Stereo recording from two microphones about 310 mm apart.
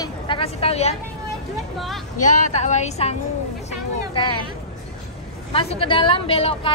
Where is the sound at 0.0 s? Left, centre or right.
Centre.